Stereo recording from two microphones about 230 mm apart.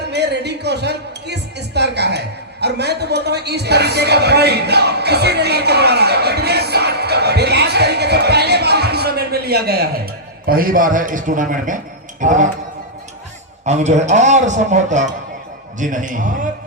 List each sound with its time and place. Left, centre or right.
0.1 s a sound: right
10.4 s a man's voice: right
13.7 s a man's voice: right